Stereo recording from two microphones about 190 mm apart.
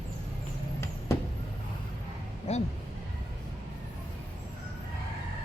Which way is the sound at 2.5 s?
35° left (ahead or behind).